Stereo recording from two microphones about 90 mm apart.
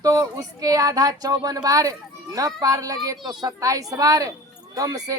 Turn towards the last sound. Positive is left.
turn(degrees=-45)  # may be behind; listen again after turning